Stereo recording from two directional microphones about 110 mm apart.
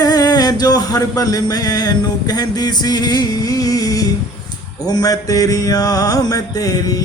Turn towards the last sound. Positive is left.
turn(degrees=35)  # may be behind; listen again after turning